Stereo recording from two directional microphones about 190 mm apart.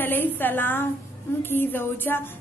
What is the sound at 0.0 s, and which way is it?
A woman's voice, 10° left (ahead or behind).